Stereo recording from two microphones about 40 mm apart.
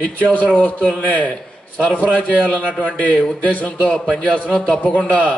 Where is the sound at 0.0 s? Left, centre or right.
Left.